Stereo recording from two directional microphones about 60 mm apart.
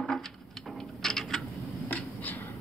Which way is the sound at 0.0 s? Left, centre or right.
Centre.